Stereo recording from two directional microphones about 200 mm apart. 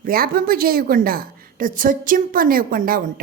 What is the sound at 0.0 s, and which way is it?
A woman's voice, 45° right (ahead or behind).